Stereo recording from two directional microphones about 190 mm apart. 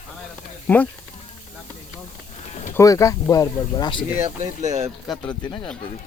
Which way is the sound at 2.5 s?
35° left (ahead or behind).